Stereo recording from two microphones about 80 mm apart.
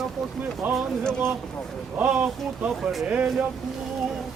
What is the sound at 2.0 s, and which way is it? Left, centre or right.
Speech, centre.